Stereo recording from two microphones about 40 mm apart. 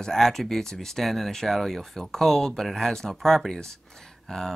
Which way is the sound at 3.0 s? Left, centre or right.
Centre.